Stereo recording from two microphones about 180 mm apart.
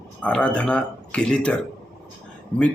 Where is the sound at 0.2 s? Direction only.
5° left (ahead or behind).